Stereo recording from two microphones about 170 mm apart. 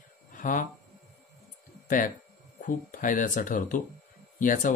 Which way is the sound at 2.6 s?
50° left (ahead or behind).